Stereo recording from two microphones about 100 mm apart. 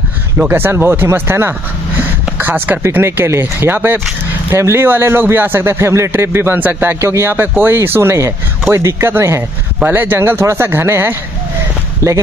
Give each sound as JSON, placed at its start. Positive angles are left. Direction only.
{"t": 0.4, "sound": "speech", "side_deg": -20}